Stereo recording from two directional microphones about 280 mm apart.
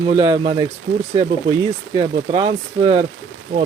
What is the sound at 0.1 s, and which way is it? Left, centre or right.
Speech, centre.